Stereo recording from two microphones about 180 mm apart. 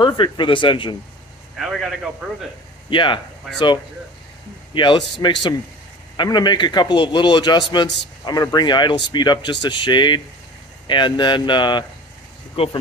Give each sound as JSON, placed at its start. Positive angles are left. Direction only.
{"t": 0.0, "sound": "speech", "side_deg": 25}
{"t": 1.6, "sound": "a man's voice", "side_deg": 0}
{"t": 2.9, "sound": "speech", "side_deg": 25}